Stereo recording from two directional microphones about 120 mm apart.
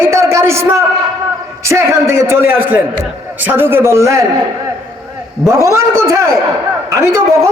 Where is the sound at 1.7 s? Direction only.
25° right (ahead or behind).